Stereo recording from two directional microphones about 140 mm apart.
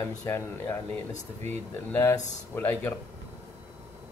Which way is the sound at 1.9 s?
20° left (ahead or behind).